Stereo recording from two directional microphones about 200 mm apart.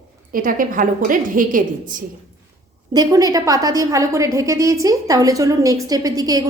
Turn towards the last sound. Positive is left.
turn(degrees=-20)  # may be behind; listen again after turning